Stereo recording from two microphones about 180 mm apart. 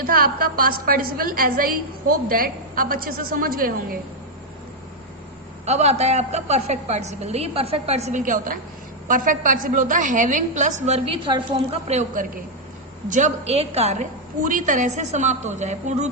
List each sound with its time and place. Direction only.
0.0 s a woman's voice: 55° right (ahead or behind)
5.6 s a woman's voice: 35° right (ahead or behind)